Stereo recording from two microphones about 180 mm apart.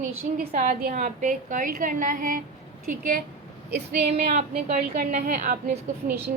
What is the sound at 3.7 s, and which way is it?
Speech, 60° right (ahead or behind).